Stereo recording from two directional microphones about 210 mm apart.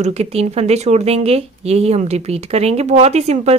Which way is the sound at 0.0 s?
30° right (ahead or behind).